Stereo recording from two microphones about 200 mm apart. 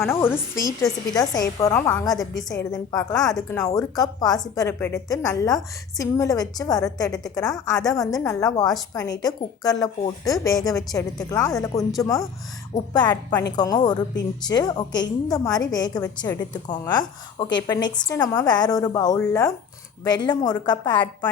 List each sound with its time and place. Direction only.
0.1 s a woman's voice: 10° left (ahead or behind)